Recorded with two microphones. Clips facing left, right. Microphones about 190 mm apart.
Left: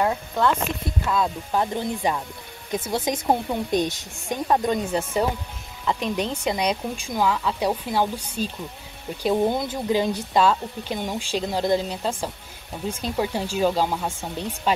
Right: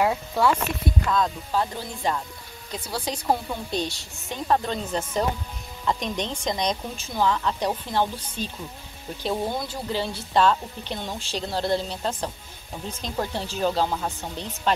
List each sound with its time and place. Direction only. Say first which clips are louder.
0.0 s speech: even; 5° right (ahead or behind)
1.0 s speech: left 1 dB; 5° left (ahead or behind)
1.5 s speech: left 3 dB; 20° left (ahead or behind)